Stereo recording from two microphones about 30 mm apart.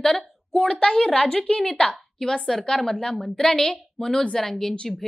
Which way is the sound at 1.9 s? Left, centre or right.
Centre.